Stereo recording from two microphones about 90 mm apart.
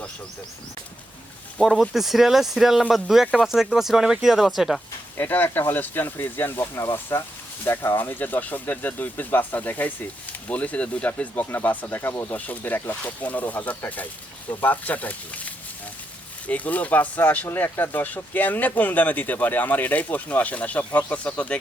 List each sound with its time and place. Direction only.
1.6 s speech: centre (ahead or behind)
5.1 s speech: 20° left (ahead or behind)